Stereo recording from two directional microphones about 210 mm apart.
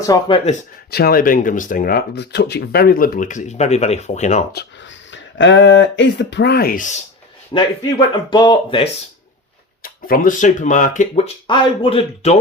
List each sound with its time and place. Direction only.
0.0 s speech: 20° left (ahead or behind)
0.9 s speech: 50° left (ahead or behind)
5.1 s speech: 60° left (ahead or behind); by 7.0 s 40° left (ahead or behind)
7.5 s speech: 20° left (ahead or behind)
9.8 s speech: 40° left (ahead or behind)